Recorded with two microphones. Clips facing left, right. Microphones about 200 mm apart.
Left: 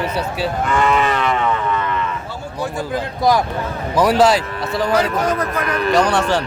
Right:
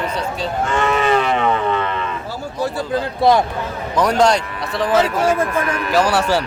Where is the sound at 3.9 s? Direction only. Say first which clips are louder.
Left 1 dB; 5° left (ahead or behind).